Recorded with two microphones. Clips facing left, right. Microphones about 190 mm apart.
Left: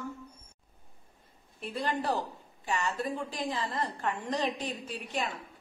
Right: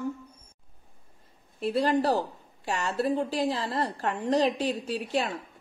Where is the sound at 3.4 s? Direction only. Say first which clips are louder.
Right 5 dB; 70° right (ahead or behind).